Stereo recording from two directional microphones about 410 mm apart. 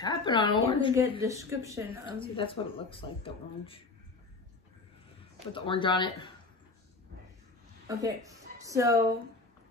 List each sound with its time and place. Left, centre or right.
0.0 s speech: centre
0.9 s speech: centre
2.1 s speech: centre
5.5 s speech: centre
7.9 s speech: centre